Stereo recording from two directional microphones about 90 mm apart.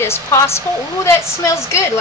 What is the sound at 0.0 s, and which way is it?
A woman's voice, 30° left (ahead or behind).